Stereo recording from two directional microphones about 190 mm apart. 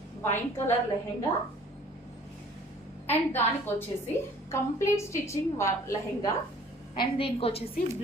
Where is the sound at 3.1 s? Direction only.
10° left (ahead or behind).